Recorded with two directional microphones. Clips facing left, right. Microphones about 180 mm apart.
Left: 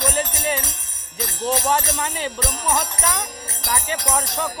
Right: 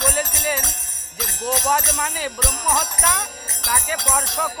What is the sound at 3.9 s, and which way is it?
Music, 10° left (ahead or behind).